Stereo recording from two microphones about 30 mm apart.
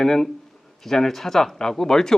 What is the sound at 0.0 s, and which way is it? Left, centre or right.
Speech, centre.